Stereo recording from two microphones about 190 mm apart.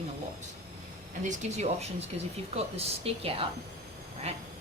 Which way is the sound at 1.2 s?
40° right (ahead or behind).